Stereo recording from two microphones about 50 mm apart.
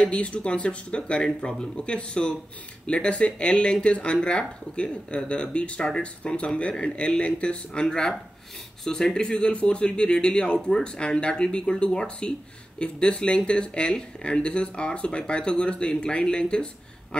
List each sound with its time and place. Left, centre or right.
0.0 s speech: left
7.8 s speech: centre